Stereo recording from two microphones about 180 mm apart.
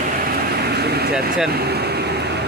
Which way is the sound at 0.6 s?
65° right (ahead or behind).